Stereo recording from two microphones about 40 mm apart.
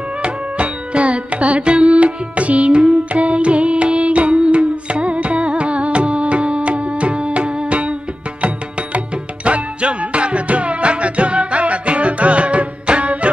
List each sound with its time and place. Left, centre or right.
0.2 s carnatic music: right
8.4 s music: right